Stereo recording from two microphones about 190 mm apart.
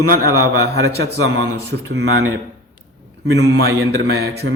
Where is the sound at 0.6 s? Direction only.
60° right (ahead or behind); by 2.2 s 75° right (ahead or behind).